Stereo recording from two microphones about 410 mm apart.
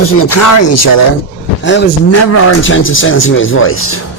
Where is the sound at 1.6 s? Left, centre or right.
Left.